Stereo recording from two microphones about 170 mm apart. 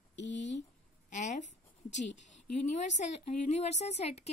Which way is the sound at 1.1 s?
45° left (ahead or behind).